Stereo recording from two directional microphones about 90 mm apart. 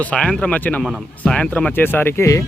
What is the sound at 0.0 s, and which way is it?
Speech, 10° left (ahead or behind).